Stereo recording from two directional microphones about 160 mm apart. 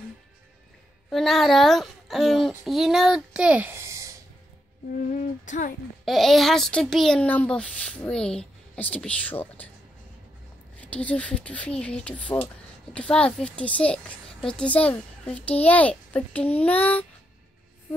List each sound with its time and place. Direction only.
1.1 s a child's voice: centre (ahead or behind); by 4.1 s 20° right (ahead or behind)
5.4 s speech: 50° left (ahead or behind)
6.0 s a child's voice: centre (ahead or behind)
10.8 s a child's voice: 10° left (ahead or behind)